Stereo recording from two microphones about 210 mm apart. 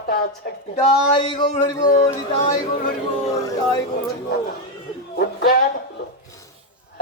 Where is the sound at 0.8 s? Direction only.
25° left (ahead or behind).